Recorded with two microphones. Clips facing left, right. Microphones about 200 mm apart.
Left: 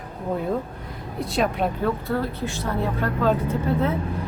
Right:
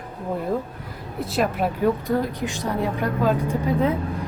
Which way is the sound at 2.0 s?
15° right (ahead or behind).